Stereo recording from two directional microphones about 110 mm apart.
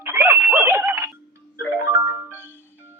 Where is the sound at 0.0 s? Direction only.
20° right (ahead or behind).